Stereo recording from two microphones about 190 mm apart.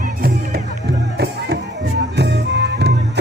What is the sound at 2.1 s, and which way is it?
Music, 60° right (ahead or behind).